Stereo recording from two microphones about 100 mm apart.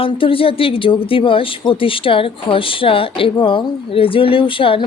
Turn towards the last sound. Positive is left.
turn(degrees=60)  # may be behind; listen again after turning